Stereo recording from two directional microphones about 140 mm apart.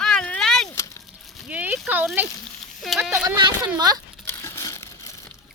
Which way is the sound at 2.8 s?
Centre (ahead or behind).